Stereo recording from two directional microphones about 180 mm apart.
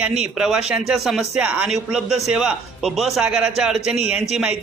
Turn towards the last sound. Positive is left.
turn(degrees=-5)  # may be behind; listen again after turning